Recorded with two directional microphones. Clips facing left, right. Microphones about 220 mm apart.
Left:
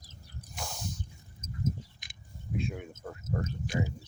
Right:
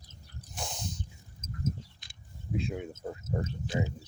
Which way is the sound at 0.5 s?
20° right (ahead or behind).